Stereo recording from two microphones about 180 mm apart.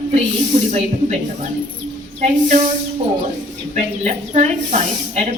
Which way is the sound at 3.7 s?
40° right (ahead or behind).